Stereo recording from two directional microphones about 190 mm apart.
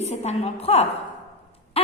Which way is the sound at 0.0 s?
35° left (ahead or behind).